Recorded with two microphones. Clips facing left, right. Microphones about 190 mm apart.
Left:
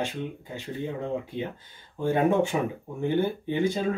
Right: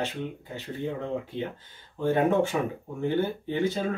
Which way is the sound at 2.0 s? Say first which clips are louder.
Even; 15° left (ahead or behind).